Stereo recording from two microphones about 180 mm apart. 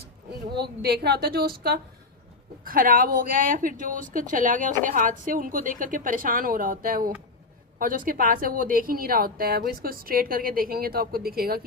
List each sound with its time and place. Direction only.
0.5 s a woman's voice: 65° right (ahead or behind)